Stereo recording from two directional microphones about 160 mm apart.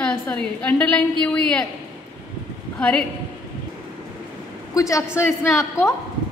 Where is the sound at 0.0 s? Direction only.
5° left (ahead or behind).